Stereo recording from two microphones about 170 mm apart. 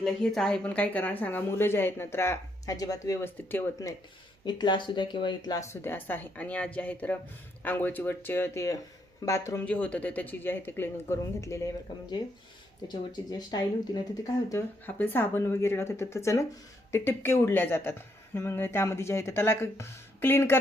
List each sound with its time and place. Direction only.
0.0 s a woman's voice: centre (ahead or behind)
4.4 s a woman's voice: 25° left (ahead or behind)
12.9 s speech: 25° left (ahead or behind)
14.5 s a woman's voice: 10° left (ahead or behind)